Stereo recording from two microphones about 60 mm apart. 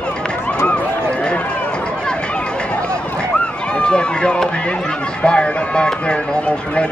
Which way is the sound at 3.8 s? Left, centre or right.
Centre.